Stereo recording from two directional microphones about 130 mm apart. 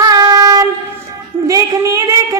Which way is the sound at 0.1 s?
30° right (ahead or behind).